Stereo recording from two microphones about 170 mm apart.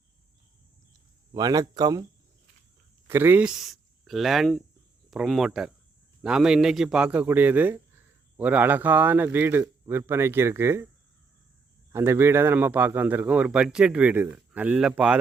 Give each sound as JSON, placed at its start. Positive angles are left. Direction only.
{"t": 1.3, "sound": "speech", "side_deg": -20}
{"t": 3.1, "sound": "a man's voice", "side_deg": -10}
{"t": 11.9, "sound": "a man's voice", "side_deg": -15}